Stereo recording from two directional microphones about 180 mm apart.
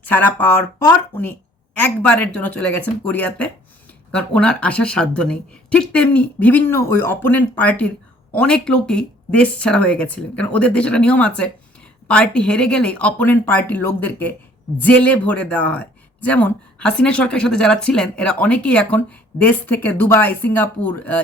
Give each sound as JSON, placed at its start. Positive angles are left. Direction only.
{"t": 0.0, "sound": "speech", "side_deg": 10}